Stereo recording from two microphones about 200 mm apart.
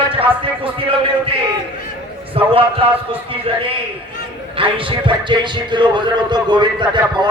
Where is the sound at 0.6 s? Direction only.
25° right (ahead or behind).